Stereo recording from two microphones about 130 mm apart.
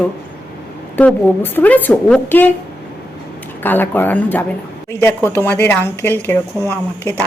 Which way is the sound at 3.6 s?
15° left (ahead or behind).